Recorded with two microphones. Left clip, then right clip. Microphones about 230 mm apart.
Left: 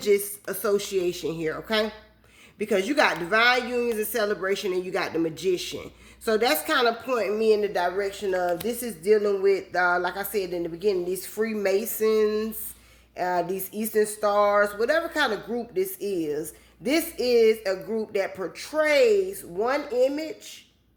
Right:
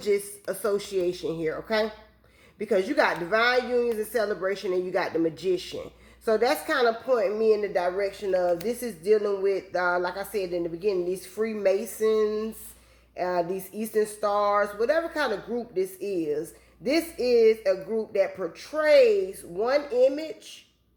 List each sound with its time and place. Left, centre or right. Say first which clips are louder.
0.0 s speech: left 3 dB; left